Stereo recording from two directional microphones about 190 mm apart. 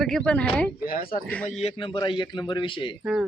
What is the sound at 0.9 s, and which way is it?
Speech, 50° left (ahead or behind).